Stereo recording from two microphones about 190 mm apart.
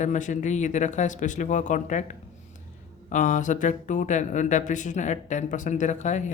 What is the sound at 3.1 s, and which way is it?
Speech, 40° left (ahead or behind).